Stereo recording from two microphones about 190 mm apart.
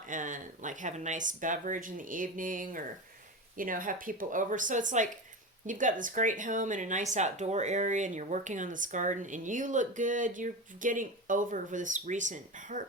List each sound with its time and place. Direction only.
0.1 s speech: 45° right (ahead or behind)